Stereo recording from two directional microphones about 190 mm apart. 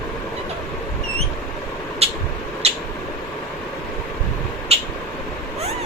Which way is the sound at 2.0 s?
30° right (ahead or behind).